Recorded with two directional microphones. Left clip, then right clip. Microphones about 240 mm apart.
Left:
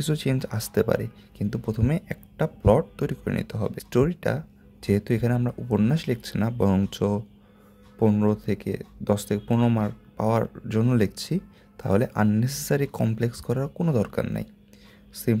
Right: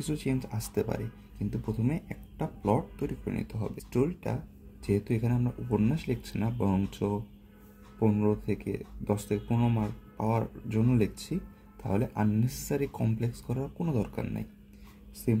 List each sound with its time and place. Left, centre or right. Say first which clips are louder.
0.0 s speech: left 6 dB; left